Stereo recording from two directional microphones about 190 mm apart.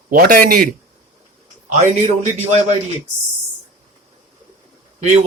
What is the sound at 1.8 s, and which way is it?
Speech, 40° right (ahead or behind).